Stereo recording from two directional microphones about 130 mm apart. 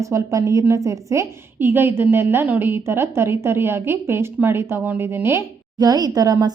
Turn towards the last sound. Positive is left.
turn(degrees=-30)  # may be behind; listen again after turning